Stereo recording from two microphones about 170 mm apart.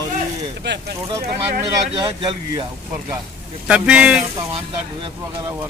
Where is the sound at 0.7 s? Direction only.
90° right.